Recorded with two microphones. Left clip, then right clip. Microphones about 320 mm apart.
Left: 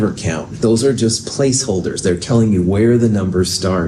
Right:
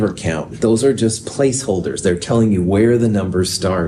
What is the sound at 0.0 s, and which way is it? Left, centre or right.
Speech, right.